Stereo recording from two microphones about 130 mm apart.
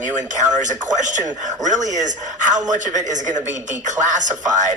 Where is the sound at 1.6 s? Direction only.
70° right (ahead or behind).